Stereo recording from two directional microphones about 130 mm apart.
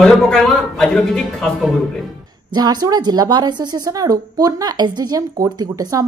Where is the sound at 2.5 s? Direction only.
30° right (ahead or behind).